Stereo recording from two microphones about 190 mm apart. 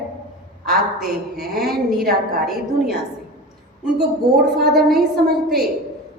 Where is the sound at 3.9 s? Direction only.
55° right (ahead or behind).